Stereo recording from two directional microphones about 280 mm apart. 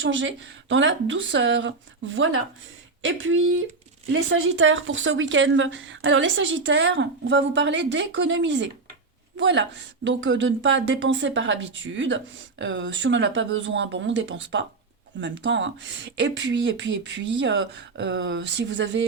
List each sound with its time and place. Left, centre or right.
0.0 s speech: right